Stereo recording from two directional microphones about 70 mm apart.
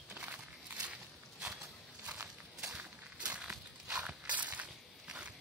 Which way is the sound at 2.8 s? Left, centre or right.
Centre.